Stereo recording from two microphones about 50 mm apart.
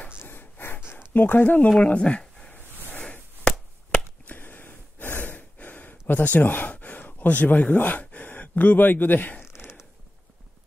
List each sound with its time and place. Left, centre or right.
0.2 s snort: left
1.1 s speech: left
1.8 s speech: left
3.0 s chop: centre
4.3 s gasp: left
5.2 s gasp: left